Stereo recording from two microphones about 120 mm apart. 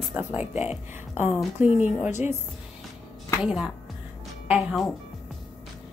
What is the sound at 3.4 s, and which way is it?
Speech, 5° right (ahead or behind).